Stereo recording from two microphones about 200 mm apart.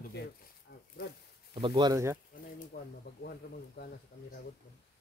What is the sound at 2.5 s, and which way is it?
Speech, 50° left (ahead or behind).